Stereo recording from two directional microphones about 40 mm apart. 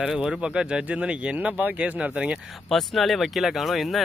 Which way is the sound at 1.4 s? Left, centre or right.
Right.